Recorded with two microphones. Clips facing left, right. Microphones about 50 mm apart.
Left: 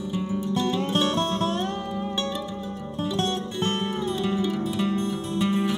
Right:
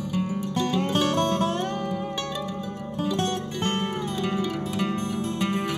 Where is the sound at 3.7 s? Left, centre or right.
Right.